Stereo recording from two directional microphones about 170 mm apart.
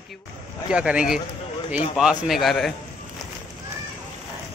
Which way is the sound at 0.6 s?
5° right (ahead or behind).